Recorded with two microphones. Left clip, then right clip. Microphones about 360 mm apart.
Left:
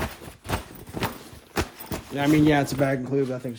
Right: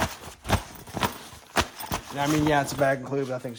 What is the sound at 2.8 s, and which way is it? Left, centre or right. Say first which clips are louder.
Speech: even; centre.